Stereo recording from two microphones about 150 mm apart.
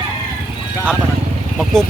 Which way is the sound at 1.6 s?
5° left (ahead or behind).